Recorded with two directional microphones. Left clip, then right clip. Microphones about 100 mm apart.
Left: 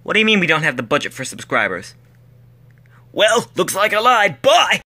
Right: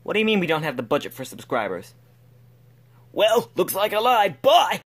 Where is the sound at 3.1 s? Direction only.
20° right (ahead or behind).